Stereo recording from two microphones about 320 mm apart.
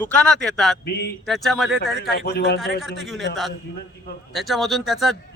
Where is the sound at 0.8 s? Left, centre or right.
Left.